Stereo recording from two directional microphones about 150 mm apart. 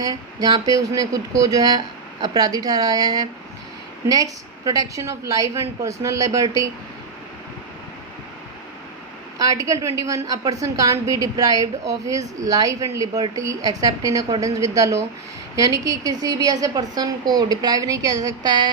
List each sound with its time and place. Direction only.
0.0 s a woman's voice: 25° right (ahead or behind)
9.4 s a woman's voice: 20° right (ahead or behind)